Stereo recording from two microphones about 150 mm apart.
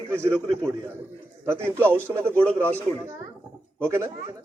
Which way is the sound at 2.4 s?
10° left (ahead or behind).